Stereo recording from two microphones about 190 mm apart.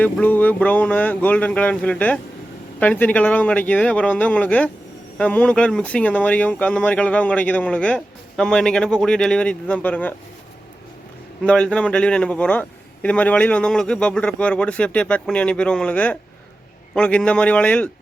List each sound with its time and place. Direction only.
0.0 s speech: 10° left (ahead or behind)
11.4 s a man's voice: 5° left (ahead or behind)